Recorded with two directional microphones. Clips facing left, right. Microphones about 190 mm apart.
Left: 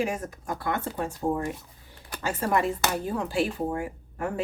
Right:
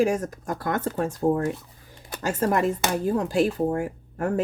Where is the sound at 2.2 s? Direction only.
45° right (ahead or behind).